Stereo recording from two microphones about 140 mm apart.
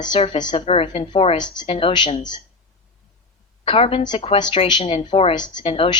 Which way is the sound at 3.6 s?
40° left (ahead or behind).